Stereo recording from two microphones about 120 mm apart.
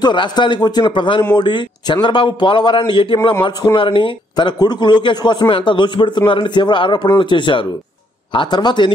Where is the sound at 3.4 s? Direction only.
30° left (ahead or behind).